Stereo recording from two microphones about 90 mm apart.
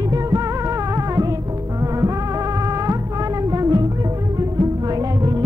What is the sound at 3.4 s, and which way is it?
Music, 40° right (ahead or behind).